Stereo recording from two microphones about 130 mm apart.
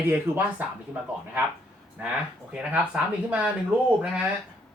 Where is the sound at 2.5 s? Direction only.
10° right (ahead or behind).